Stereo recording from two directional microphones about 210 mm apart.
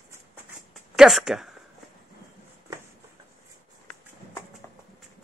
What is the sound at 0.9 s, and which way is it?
Speech, centre (ahead or behind).